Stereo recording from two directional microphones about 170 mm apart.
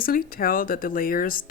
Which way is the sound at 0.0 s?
60° left (ahead or behind).